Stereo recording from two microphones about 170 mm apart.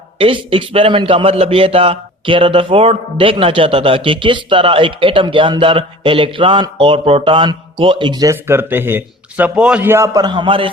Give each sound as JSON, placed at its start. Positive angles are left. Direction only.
{"t": 0.2, "sound": "a man's voice", "side_deg": -35}